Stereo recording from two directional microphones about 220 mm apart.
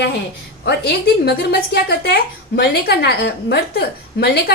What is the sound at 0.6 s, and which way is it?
A woman's voice, 45° left (ahead or behind).